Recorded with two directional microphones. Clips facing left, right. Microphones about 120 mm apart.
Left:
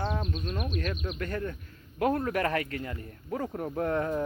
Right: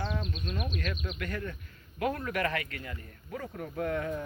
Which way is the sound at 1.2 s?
30° left (ahead or behind).